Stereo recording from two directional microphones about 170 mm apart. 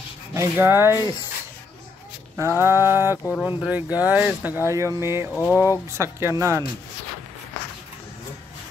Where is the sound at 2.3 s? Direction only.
15° right (ahead or behind).